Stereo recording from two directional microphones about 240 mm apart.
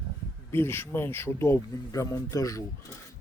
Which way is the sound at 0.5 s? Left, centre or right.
Centre.